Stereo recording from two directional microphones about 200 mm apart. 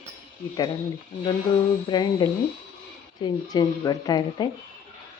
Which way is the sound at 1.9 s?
20° left (ahead or behind).